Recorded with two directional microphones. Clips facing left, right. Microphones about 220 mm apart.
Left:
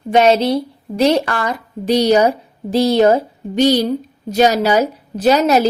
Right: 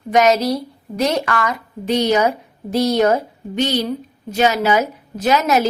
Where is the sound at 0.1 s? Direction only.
30° left (ahead or behind).